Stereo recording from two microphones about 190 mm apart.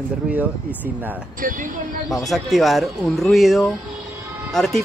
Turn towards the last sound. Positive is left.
turn(degrees=0)  # may be behind; listen again after turning